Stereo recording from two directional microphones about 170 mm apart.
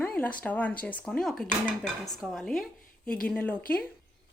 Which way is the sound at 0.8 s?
10° left (ahead or behind).